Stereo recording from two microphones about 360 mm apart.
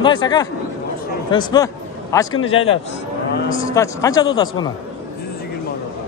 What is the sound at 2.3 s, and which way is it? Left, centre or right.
Speech, left.